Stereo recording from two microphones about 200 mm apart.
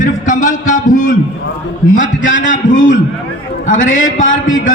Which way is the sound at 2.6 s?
40° left (ahead or behind).